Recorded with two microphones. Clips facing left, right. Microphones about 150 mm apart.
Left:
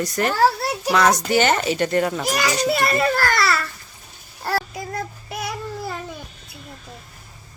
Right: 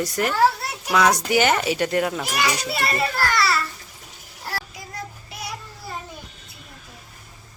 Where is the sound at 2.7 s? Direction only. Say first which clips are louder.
Left 5 dB; 50° left (ahead or behind).